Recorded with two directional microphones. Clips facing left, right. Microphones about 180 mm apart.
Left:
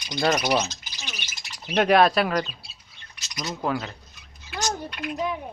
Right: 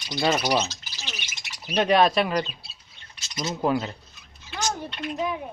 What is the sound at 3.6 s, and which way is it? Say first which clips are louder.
Speech: right 3 dB; 20° right (ahead or behind).